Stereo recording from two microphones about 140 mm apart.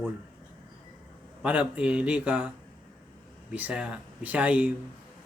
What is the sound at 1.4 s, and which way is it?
Speech, 10° right (ahead or behind).